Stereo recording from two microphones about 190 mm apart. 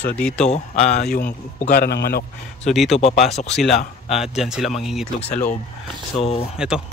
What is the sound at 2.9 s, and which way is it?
Speech, 35° left (ahead or behind).